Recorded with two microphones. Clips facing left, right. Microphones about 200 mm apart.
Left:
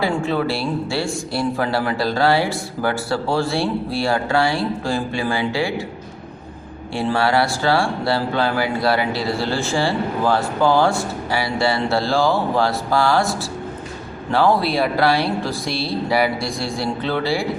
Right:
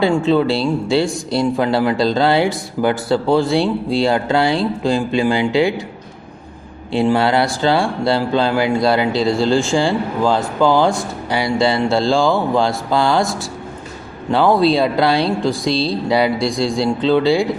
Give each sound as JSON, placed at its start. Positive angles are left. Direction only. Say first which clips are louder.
{"t": 0.3, "sound": "speech", "louder": "right 6 dB", "side_deg": -20}
{"t": 6.9, "sound": "speech", "louder": "right 4 dB", "side_deg": -20}
{"t": 14.3, "sound": "speech", "louder": "right 4 dB", "side_deg": -20}